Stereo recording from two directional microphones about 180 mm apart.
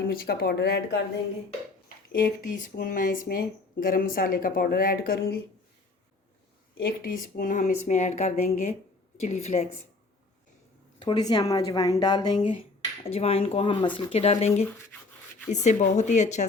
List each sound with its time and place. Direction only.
0.1 s speech: 60° left (ahead or behind)
2.1 s speech: 50° left (ahead or behind)
6.7 s speech: 55° left (ahead or behind); by 9.6 s 35° left (ahead or behind)
11.0 s a woman's voice: 25° left (ahead or behind); by 16.5 s 40° left (ahead or behind)